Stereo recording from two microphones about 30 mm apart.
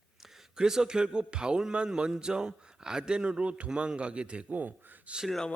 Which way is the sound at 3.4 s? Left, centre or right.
Right.